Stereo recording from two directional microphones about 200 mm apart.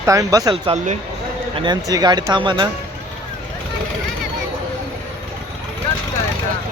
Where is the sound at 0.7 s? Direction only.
35° right (ahead or behind).